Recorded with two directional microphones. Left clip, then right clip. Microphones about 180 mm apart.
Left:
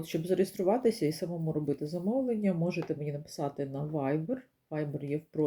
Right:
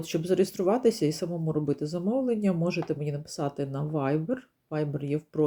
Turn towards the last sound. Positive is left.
turn(degrees=-25)  # may be behind; listen again after turning